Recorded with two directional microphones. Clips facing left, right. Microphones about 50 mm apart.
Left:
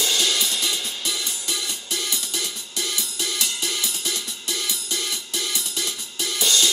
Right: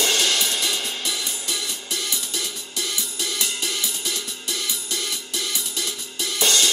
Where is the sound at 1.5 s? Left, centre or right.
Centre.